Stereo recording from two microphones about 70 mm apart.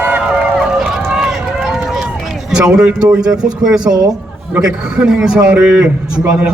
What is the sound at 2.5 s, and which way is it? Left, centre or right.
A man's voice, centre.